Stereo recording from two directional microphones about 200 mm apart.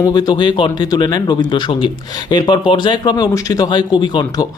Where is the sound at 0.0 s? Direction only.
20° left (ahead or behind).